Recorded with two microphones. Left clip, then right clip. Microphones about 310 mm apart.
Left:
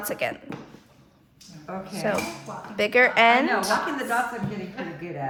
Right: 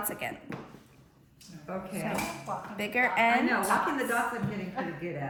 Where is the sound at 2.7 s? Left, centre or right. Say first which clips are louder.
Left 9 dB; centre.